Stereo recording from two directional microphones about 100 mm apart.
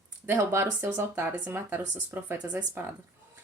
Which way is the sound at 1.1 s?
15° right (ahead or behind).